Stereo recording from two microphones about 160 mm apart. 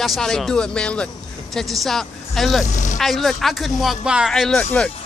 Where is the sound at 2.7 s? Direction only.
50° left (ahead or behind).